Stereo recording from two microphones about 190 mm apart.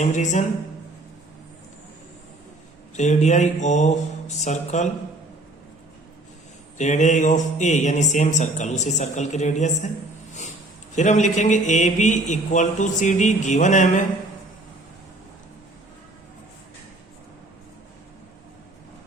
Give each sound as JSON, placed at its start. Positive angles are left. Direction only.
{"t": 0.0, "sound": "mantra", "side_deg": 40}
{"t": 2.9, "sound": "mantra", "side_deg": 40}
{"t": 6.7, "sound": "mantra", "side_deg": 40}
{"t": 10.9, "sound": "mantra", "side_deg": 40}